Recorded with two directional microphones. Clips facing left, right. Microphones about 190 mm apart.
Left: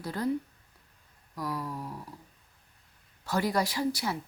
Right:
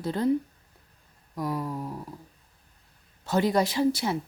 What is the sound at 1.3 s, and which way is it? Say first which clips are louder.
Speech: right 5 dB; 25° right (ahead or behind).